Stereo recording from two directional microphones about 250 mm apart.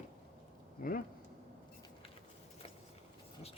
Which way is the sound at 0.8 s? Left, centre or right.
Left.